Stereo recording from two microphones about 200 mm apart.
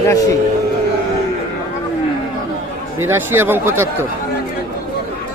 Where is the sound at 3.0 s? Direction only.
10° right (ahead or behind).